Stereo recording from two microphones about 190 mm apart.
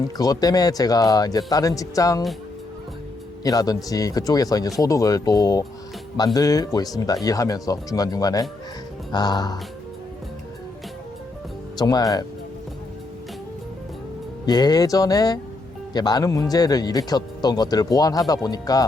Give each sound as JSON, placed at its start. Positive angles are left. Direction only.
{"t": 0.2, "sound": "speech", "side_deg": 20}
{"t": 3.4, "sound": "speech", "side_deg": 20}
{"t": 11.8, "sound": "speech", "side_deg": 20}
{"t": 14.4, "sound": "speech", "side_deg": 20}